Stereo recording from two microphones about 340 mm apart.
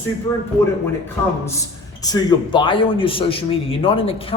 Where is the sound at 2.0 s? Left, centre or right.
Centre.